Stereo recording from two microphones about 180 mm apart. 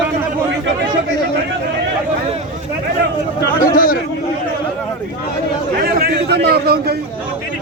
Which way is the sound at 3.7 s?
50° left (ahead or behind).